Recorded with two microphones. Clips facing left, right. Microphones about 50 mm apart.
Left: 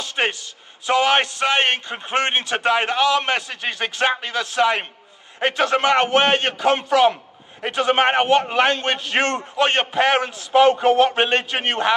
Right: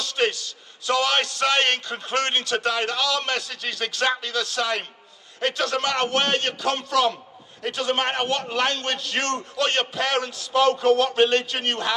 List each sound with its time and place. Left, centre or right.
0.0 s a man's voice: left